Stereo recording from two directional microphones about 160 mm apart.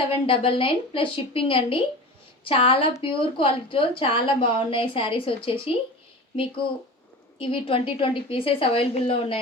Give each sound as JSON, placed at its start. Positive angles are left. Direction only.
{"t": 0.1, "sound": "a woman's voice", "side_deg": 35}
{"t": 7.3, "sound": "a woman's voice", "side_deg": 35}